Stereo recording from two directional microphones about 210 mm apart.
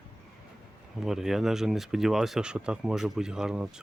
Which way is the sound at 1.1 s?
Centre (ahead or behind).